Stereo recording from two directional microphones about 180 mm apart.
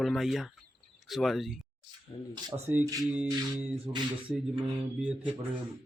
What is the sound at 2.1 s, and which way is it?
Speech, 30° left (ahead or behind).